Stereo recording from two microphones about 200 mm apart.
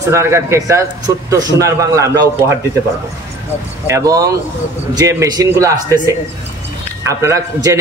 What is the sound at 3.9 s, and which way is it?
A man's voice, 15° right (ahead or behind).